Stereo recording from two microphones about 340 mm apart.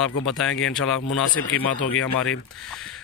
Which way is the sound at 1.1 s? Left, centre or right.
Left.